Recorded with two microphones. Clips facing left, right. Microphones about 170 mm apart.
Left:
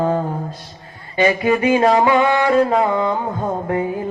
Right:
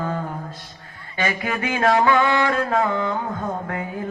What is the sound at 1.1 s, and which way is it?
Mantra, 20° left (ahead or behind).